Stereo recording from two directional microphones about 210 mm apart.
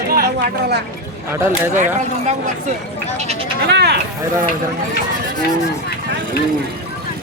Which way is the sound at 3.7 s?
50° right (ahead or behind).